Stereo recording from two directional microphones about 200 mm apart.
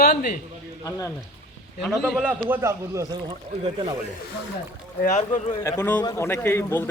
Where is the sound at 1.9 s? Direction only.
Centre (ahead or behind).